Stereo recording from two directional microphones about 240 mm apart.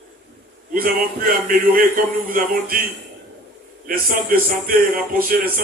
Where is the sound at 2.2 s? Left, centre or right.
Right.